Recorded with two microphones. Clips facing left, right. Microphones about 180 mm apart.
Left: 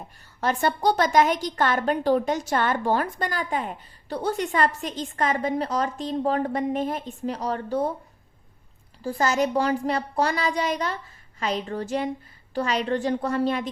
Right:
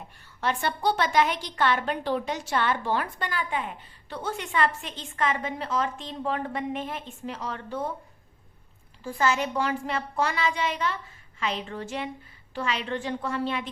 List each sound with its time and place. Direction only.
0.3 s a woman's voice: 40° left (ahead or behind)
9.0 s a woman's voice: 40° left (ahead or behind)